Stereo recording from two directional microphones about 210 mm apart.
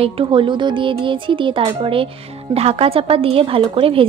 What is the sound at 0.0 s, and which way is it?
Speech, 25° right (ahead or behind).